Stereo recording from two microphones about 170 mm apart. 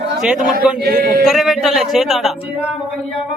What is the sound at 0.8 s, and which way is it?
Speech, 60° right (ahead or behind).